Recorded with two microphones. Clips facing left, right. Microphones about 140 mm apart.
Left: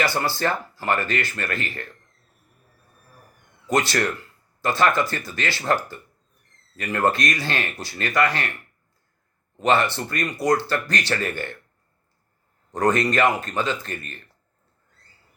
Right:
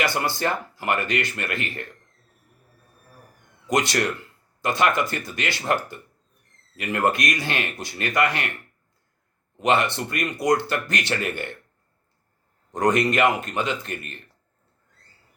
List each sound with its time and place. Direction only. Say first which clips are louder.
0.0 s speech: left 1 dB; 20° right (ahead or behind)
3.7 s speech: left 1 dB; 20° right (ahead or behind)
9.6 s speech: left 1 dB; 20° right (ahead or behind)
12.7 s speech: even; 20° right (ahead or behind)